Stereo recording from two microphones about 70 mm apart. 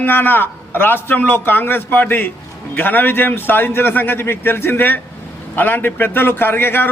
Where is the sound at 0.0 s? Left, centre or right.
Left.